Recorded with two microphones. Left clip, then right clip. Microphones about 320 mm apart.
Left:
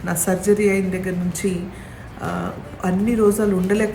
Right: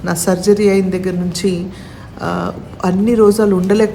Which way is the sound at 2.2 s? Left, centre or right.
Centre.